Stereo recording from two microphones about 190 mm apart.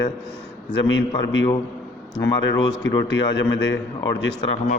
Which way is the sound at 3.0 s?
65° left (ahead or behind).